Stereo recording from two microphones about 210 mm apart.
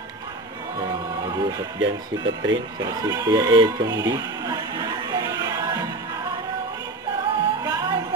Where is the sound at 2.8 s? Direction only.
15° right (ahead or behind).